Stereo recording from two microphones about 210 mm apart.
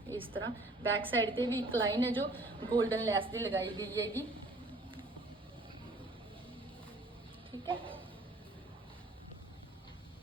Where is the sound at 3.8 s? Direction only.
15° right (ahead or behind).